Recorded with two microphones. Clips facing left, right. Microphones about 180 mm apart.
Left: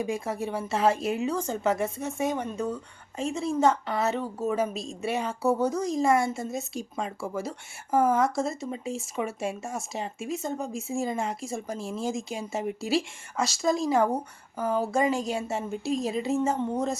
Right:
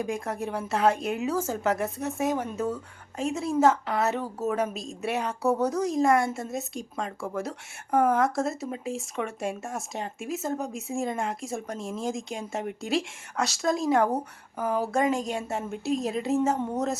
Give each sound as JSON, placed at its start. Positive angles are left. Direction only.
{"t": 0.0, "sound": "speech", "side_deg": 0}